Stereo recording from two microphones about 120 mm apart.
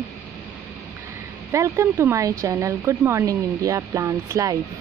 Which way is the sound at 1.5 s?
25° right (ahead or behind).